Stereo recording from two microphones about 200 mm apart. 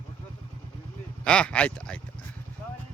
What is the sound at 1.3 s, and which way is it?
Speech, 5° left (ahead or behind).